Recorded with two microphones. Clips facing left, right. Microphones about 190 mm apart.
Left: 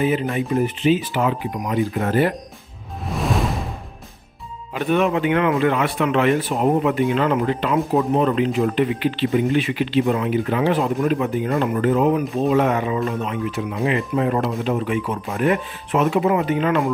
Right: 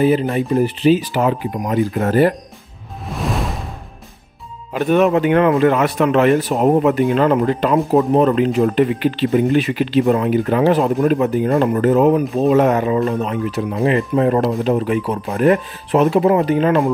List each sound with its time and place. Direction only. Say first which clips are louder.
0.0 s speech: right 5 dB; 35° right (ahead or behind)
3.1 s music: even; centre (ahead or behind)
4.7 s speech: right 5 dB; 40° right (ahead or behind)